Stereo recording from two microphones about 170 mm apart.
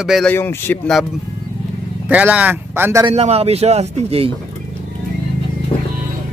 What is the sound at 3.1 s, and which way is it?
A man's voice, 35° right (ahead or behind).